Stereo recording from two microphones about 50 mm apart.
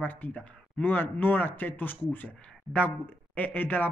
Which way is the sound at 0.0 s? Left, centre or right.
Left.